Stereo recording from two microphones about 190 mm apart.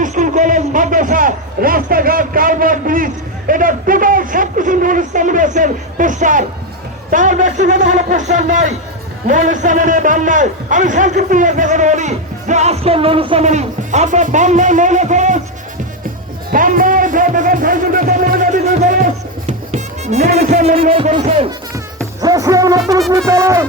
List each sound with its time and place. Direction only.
0.0 s a man's voice: 40° right (ahead or behind)
16.5 s music: 45° right (ahead or behind)
20.3 s a man's voice: 35° right (ahead or behind)
21.9 s music: 20° right (ahead or behind)